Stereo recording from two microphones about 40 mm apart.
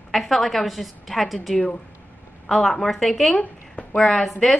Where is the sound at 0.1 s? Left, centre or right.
Centre.